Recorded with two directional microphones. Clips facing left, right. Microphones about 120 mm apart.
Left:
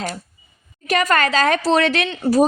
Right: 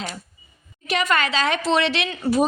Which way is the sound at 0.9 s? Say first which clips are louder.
Left 4 dB; 45° left (ahead or behind).